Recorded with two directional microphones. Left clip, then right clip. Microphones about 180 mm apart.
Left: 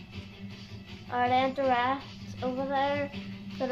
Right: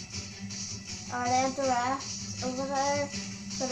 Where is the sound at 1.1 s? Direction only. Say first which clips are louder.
Left 2 dB; 30° left (ahead or behind).